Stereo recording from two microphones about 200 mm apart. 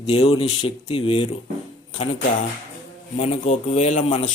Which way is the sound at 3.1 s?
35° left (ahead or behind).